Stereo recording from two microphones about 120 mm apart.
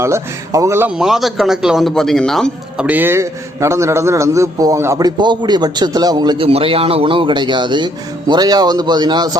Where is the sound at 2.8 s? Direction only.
15° right (ahead or behind).